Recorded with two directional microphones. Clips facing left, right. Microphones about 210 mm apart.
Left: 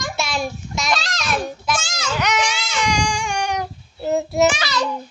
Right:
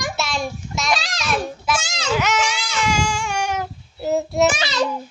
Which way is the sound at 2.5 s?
5° right (ahead or behind).